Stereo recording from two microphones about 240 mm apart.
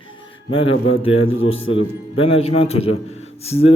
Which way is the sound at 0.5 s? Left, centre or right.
Left.